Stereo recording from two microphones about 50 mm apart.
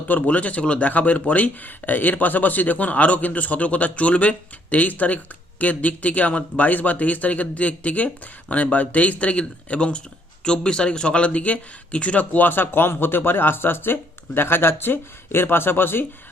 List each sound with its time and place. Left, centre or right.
0.1 s speech: left